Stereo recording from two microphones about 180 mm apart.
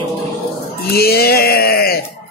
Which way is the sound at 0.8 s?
60° left (ahead or behind).